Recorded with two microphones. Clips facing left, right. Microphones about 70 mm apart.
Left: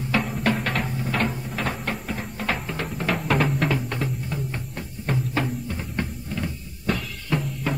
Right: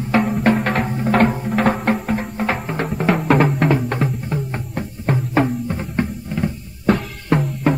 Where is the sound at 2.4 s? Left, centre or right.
Right.